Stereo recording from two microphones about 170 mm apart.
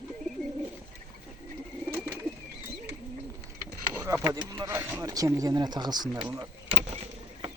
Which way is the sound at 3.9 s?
15° right (ahead or behind).